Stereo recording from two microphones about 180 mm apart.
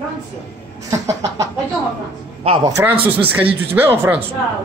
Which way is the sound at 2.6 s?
15° right (ahead or behind).